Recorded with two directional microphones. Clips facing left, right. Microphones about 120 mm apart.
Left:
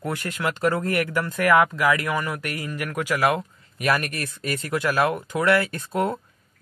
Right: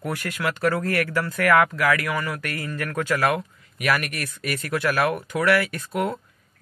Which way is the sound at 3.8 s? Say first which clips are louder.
Left 1 dB; 30° left (ahead or behind).